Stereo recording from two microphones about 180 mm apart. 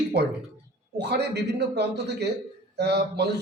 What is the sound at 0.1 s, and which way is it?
A man's voice, 65° right (ahead or behind).